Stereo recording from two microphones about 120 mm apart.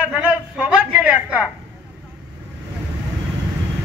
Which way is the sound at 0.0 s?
10° right (ahead or behind).